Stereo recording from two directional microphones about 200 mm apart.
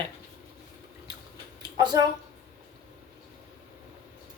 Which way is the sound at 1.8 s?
20° right (ahead or behind).